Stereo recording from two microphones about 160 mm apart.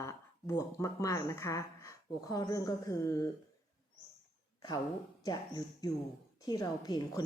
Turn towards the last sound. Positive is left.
turn(degrees=25)  # may be behind; listen again after turning